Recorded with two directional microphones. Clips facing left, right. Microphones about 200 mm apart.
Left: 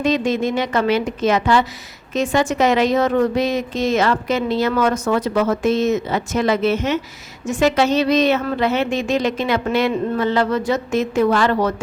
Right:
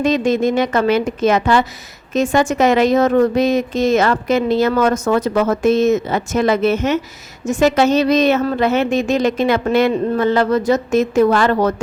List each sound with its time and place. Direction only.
0.0 s a woman's voice: 45° right (ahead or behind)